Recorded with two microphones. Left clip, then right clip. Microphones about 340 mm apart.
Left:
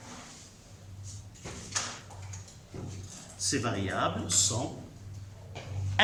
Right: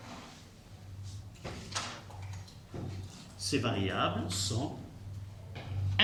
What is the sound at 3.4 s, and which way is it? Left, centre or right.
Speech, centre.